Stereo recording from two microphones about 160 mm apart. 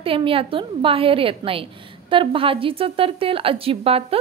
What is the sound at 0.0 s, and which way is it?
A woman's voice, 35° right (ahead or behind).